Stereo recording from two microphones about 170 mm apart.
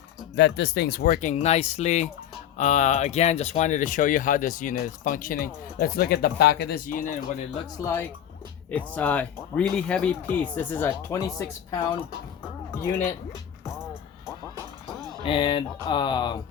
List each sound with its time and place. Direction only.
0.3 s speech: 90° left; by 7.2 s 50° left (ahead or behind)
7.8 s speech: 15° left (ahead or behind)
15.2 s speech: 30° left (ahead or behind)